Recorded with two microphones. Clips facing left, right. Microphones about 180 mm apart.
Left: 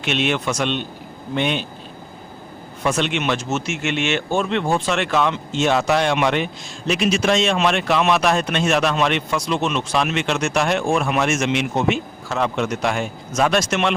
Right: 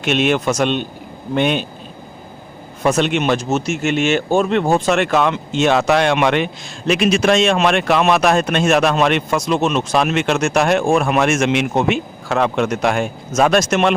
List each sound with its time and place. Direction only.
0.0 s speech: 45° right (ahead or behind)
2.8 s speech: 45° right (ahead or behind)